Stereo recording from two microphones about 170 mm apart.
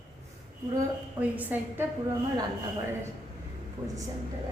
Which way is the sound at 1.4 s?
10° right (ahead or behind).